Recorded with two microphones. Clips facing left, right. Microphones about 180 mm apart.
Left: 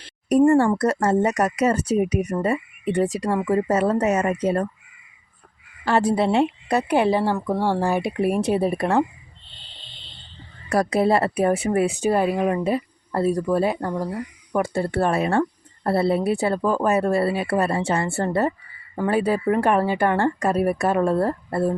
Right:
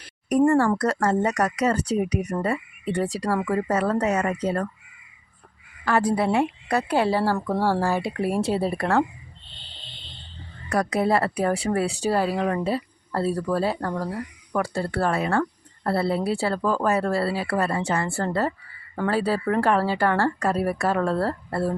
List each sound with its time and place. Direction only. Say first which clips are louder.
0.0 s a sound: left 3 dB; 30° left (ahead or behind)
0.8 s speech: left 3 dB; 25° left (ahead or behind)
5.8 s speech: left 2 dB; 25° left (ahead or behind)
10.7 s speech: left 3 dB; 30° left (ahead or behind)